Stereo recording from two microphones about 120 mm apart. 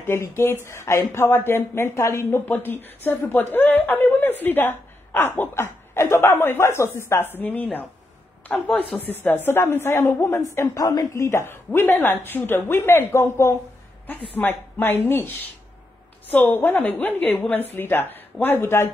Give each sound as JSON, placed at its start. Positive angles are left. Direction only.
{"t": 0.0, "sound": "a woman's voice", "side_deg": 20}